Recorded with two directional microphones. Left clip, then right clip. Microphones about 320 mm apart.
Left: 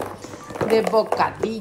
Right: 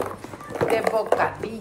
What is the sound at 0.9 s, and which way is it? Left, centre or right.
Speech, left.